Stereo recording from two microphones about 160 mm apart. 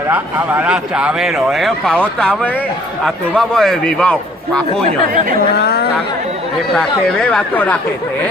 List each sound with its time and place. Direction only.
0.1 s speech: 10° right (ahead or behind); by 4.6 s 5° left (ahead or behind)
5.5 s speech: 80° left
6.7 s speech: 5° left (ahead or behind)